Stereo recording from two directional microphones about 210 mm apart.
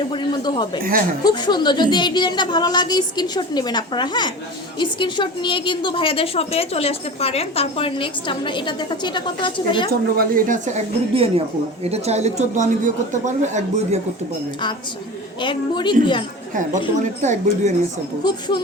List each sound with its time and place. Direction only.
0.1 s a woman's voice: 20° left (ahead or behind)
10.2 s a woman's voice: 40° right (ahead or behind)
11.1 s a woman's voice: 25° right (ahead or behind)
15.4 s a woman's voice: 20° left (ahead or behind)
17.2 s a woman's voice: 35° right (ahead or behind)
18.2 s a woman's voice: 20° left (ahead or behind)